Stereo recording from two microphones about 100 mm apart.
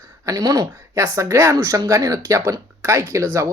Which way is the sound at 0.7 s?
25° right (ahead or behind).